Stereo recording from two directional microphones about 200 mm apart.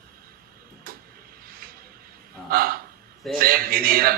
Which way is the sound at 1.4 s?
45° right (ahead or behind).